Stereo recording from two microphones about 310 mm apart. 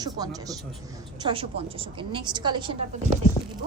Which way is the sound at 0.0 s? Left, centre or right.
Centre.